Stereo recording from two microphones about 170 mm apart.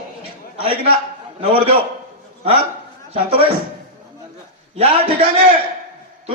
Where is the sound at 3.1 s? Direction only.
35° right (ahead or behind).